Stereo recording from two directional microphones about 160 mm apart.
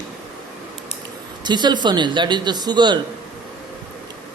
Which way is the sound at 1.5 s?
30° right (ahead or behind).